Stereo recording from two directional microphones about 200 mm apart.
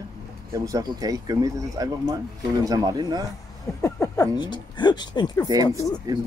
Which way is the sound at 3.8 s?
15° left (ahead or behind).